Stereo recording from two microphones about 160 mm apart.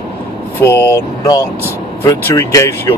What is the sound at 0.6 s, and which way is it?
Speech, 15° left (ahead or behind).